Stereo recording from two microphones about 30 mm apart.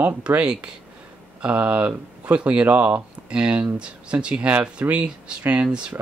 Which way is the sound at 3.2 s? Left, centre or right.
Right.